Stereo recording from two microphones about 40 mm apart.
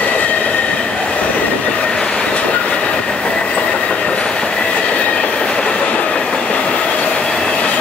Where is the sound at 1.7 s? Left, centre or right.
Left.